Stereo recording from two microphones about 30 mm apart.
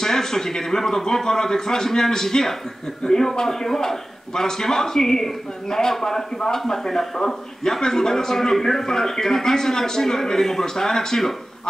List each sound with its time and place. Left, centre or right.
0.0 s speech: centre